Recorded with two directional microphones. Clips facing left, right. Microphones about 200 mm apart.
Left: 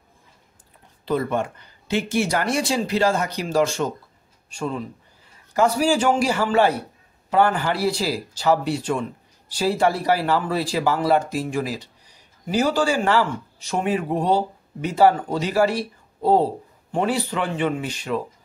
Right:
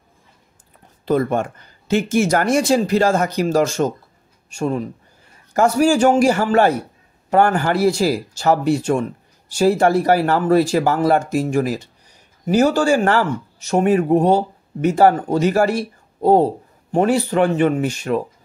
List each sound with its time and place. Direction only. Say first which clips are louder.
1.0 s speech: right 5 dB; 45° right (ahead or behind)